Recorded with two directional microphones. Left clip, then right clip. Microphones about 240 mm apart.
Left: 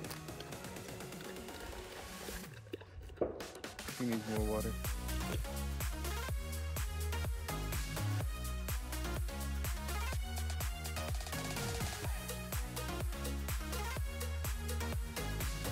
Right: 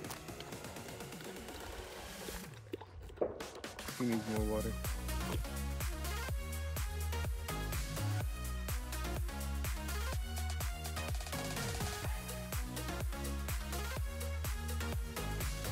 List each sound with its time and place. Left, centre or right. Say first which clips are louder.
3.2 s music: even; left
4.0 s music: right 1 dB; centre
10.6 s music: left 1 dB; centre